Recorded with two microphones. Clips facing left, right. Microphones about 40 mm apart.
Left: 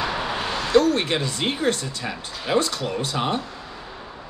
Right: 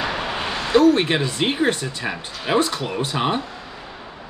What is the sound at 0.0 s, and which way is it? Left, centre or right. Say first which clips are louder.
Speech: right 1 dB; centre.